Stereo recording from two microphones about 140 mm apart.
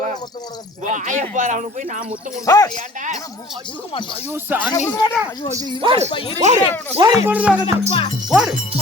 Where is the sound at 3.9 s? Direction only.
40° left (ahead or behind).